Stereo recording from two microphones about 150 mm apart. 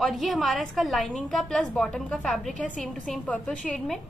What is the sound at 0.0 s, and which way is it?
A woman's voice, centre (ahead or behind).